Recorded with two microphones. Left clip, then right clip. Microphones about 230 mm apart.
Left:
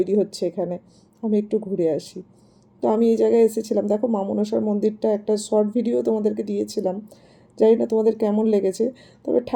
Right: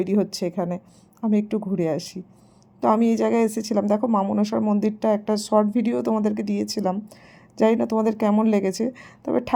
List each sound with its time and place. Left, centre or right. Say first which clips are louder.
0.0 s speech: left 3 dB; right